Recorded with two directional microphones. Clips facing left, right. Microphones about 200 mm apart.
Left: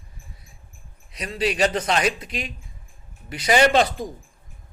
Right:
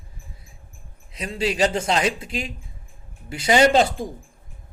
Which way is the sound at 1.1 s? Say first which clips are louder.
Even; 25° right (ahead or behind).